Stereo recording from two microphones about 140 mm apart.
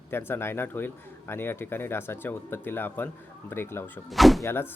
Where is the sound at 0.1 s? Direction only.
15° left (ahead or behind).